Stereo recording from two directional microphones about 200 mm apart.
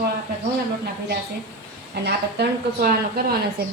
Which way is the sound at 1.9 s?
55° right (ahead or behind).